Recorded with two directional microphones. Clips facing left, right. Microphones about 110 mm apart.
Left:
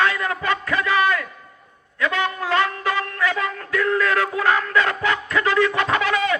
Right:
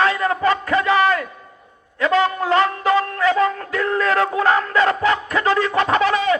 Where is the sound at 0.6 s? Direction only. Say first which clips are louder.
Right 4 dB; 30° right (ahead or behind).